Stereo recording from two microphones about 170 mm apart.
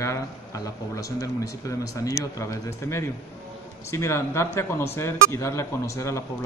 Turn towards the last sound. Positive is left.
turn(degrees=15)  # may be behind; listen again after turning